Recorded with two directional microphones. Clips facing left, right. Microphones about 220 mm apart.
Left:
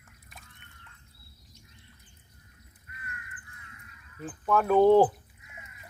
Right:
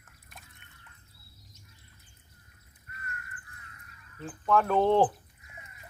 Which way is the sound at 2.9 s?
45° right (ahead or behind).